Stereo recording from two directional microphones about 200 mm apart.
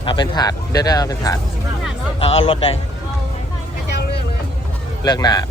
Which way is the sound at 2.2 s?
30° left (ahead or behind).